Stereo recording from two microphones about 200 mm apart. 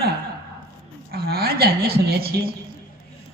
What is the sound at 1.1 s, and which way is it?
A woman's voice, 50° right (ahead or behind).